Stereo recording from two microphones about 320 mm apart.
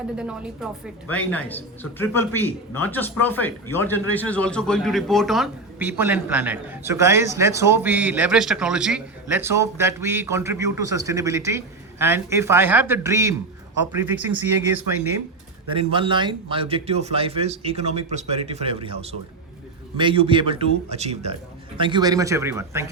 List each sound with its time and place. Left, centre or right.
0.2 s speech: centre
15.7 s speech: centre
20.0 s speech: centre